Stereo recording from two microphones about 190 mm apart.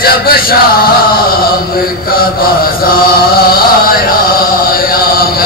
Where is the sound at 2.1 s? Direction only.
50° left (ahead or behind).